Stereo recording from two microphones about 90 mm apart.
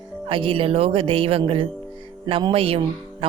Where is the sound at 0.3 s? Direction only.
75° right (ahead or behind).